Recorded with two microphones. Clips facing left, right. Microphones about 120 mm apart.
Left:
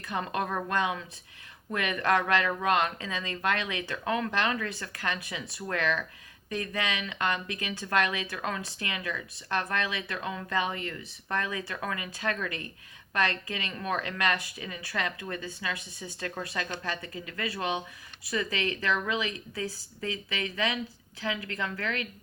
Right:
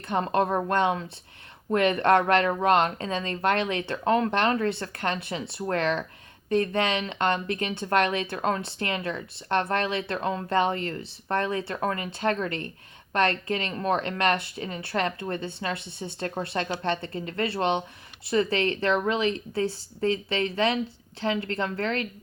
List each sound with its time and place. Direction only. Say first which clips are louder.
0.0 s a woman's voice: right 7 dB; 35° right (ahead or behind)